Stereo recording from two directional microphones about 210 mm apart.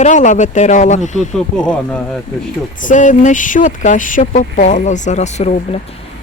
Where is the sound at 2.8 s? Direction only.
35° left (ahead or behind).